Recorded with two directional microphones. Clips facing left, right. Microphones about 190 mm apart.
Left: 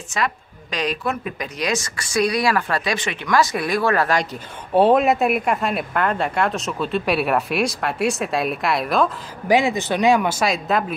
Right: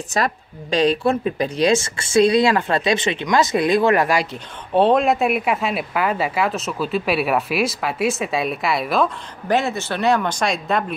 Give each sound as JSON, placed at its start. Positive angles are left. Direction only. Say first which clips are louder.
{"t": 0.1, "sound": "speech", "louder": "right 2 dB", "side_deg": -35}
{"t": 4.7, "sound": "speech", "louder": "left 1 dB", "side_deg": 5}
{"t": 9.5, "sound": "speech", "louder": "left 2 dB", "side_deg": 15}